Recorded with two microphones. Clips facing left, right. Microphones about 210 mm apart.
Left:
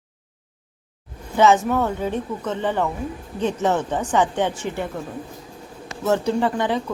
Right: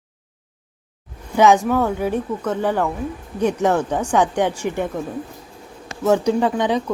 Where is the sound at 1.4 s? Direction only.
15° right (ahead or behind).